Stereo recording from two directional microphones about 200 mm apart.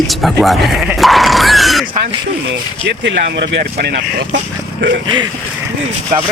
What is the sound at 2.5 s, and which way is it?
Speech, 60° right (ahead or behind).